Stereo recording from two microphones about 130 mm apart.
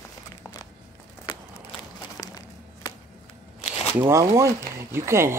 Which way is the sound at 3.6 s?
55° left (ahead or behind).